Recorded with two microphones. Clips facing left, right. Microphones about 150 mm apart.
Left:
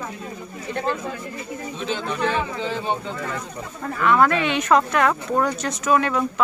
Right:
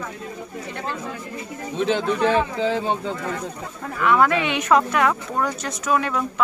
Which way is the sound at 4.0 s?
10° right (ahead or behind).